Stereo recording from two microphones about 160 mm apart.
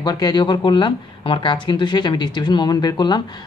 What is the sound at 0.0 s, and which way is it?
Speech, 25° left (ahead or behind).